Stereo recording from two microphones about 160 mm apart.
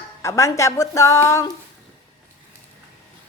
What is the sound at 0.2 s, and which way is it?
A woman's voice, 20° left (ahead or behind).